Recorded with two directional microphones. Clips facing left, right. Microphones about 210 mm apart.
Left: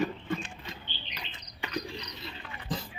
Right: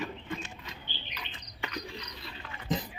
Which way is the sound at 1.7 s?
30° left (ahead or behind).